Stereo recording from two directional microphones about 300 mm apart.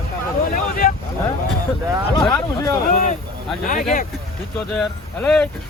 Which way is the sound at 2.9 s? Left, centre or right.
Left.